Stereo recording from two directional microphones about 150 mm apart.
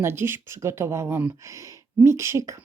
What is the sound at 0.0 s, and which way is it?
Speech, 15° right (ahead or behind).